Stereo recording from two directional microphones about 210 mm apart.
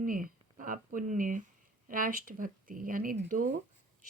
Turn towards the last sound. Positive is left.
turn(degrees=-40)  # may be behind; listen again after turning